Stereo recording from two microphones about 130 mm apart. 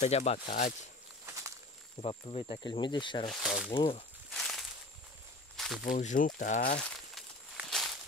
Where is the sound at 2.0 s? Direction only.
50° left (ahead or behind).